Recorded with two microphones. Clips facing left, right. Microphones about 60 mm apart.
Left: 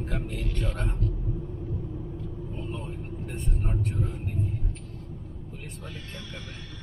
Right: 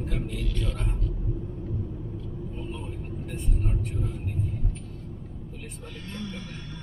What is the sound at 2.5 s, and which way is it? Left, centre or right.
Vehicle, centre.